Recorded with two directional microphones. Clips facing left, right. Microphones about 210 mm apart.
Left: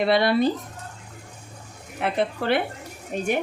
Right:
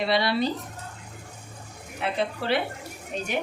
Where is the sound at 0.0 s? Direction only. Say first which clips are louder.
Left 5 dB; 50° left (ahead or behind).